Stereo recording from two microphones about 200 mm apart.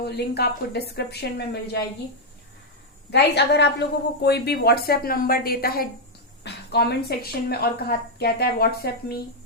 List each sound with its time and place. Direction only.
0.0 s speech: 55° left (ahead or behind)
3.1 s a woman's voice: 60° left (ahead or behind)